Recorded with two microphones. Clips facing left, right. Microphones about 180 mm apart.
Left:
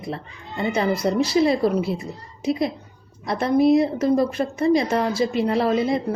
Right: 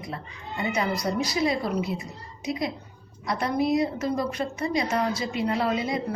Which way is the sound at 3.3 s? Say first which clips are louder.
Left 7 dB; 25° left (ahead or behind).